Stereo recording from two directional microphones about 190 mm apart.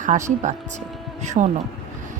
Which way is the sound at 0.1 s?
40° right (ahead or behind).